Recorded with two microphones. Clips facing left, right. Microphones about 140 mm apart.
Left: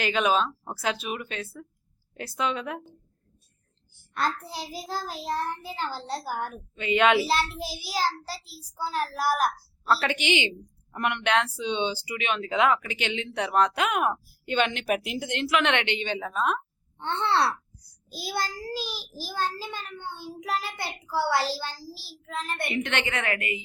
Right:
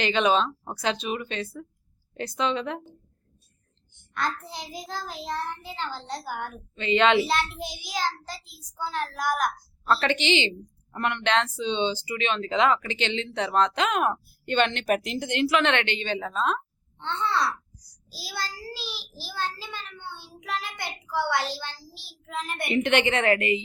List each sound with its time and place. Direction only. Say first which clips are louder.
0.0 s speech: right 2 dB; 5° left (ahead or behind)
5.2 s a child's voice: left 2 dB; 40° left (ahead or behind)
6.7 s speech: right 1 dB; 10° left (ahead or behind)
7.3 s a child's voice: left 1 dB; 30° left (ahead or behind)
9.8 s speech: right 1 dB; 5° left (ahead or behind)
15.6 s speech: right 1 dB; 15° left (ahead or behind)
17.0 s a child's voice: left 2 dB; 55° left (ahead or behind); by 21.8 s 35° left (ahead or behind)
22.3 s a child's voice: right 2 dB; 10° right (ahead or behind); by 23.6 s 25° right (ahead or behind)